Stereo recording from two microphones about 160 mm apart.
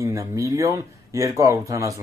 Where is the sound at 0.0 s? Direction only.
20° right (ahead or behind).